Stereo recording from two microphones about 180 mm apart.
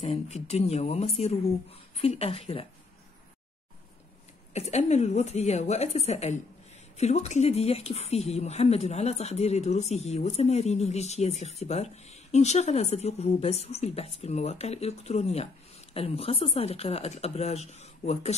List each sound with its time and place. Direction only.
0.0 s speech: 35° left (ahead or behind)
4.6 s speech: 40° left (ahead or behind)